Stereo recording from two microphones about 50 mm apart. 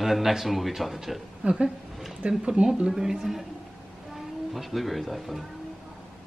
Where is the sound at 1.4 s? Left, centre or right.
Centre.